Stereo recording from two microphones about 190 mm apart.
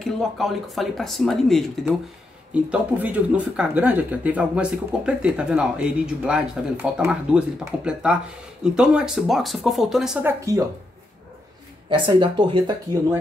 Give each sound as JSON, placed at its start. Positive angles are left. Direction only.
{"t": 0.0, "sound": "speech", "side_deg": 0}
{"t": 11.9, "sound": "speech", "side_deg": -25}